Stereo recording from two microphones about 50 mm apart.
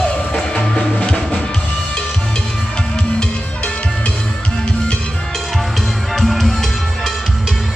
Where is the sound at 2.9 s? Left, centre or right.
Left.